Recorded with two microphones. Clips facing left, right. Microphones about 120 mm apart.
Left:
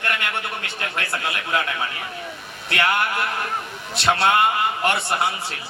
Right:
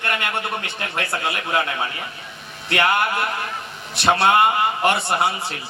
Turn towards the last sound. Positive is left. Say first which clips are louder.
# right 2 dB
turn(degrees=-25)  # may be behind; listen again after turning